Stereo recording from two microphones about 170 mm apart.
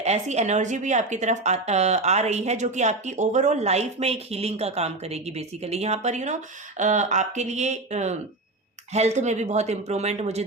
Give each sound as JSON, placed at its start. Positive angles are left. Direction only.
{"t": 0.0, "sound": "a woman's voice", "side_deg": -40}